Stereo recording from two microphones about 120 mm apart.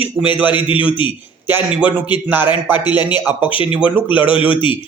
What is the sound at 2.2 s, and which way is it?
A man's voice, 15° right (ahead or behind).